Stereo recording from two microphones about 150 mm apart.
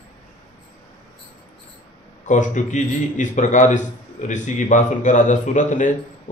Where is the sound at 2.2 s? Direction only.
55° left (ahead or behind).